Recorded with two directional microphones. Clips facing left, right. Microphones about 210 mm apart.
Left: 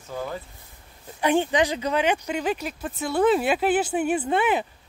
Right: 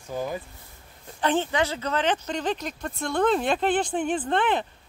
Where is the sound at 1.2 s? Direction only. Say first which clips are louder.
Left 3 dB; 15° left (ahead or behind).